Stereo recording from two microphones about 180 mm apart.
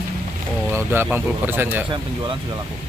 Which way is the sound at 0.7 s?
15° right (ahead or behind).